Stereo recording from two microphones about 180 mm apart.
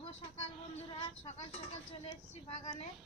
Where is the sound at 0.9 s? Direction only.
30° left (ahead or behind).